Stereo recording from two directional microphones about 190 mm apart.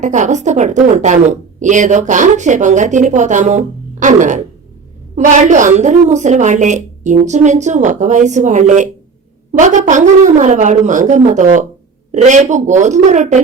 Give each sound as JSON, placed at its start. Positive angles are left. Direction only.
{"t": 0.0, "sound": "speech", "side_deg": -40}